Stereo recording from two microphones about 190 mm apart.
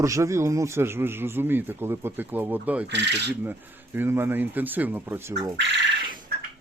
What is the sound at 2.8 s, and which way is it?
Speech, 65° right (ahead or behind).